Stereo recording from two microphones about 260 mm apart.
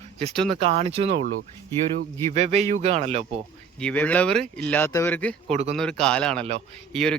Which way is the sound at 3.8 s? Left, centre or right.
Centre.